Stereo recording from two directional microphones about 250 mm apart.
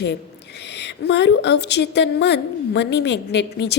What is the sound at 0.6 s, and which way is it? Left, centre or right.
A woman's voice, left.